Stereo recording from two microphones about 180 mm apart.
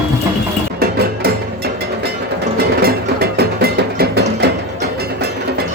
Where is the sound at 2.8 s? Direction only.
60° right (ahead or behind).